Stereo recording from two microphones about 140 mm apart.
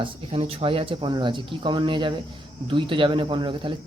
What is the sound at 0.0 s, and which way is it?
Speech, 40° right (ahead or behind).